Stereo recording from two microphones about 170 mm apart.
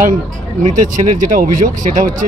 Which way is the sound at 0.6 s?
45° right (ahead or behind).